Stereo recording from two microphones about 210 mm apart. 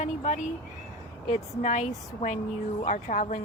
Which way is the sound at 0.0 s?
35° left (ahead or behind).